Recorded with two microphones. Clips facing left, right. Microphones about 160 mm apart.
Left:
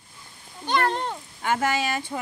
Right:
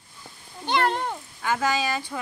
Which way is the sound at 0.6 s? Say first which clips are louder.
Even; 15° right (ahead or behind).